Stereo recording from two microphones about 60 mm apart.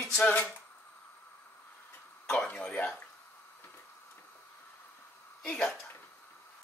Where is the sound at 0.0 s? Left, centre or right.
Centre.